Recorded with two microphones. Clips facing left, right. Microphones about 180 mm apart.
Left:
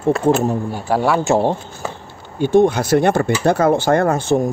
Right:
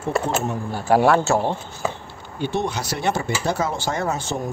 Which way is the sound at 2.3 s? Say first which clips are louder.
Left 11 dB; 50° left (ahead or behind).